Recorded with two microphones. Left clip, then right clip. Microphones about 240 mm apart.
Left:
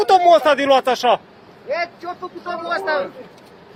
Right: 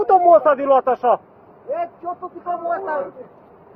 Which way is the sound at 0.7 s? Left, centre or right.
Left.